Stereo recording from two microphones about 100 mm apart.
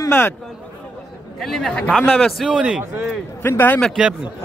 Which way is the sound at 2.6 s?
10° right (ahead or behind).